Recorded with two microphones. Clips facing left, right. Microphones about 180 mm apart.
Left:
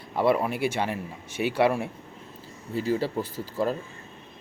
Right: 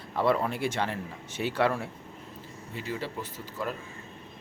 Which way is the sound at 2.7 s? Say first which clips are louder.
Left 9 dB; 35° left (ahead or behind).